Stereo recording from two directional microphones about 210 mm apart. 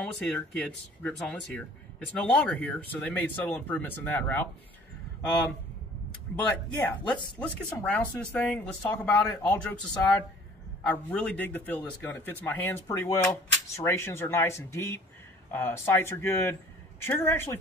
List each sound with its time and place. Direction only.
1.0 s speech: 5° left (ahead or behind)
6.3 s speech: 10° left (ahead or behind)
7.1 s speech: 20° left (ahead or behind)
7.4 s speech: 5° left (ahead or behind)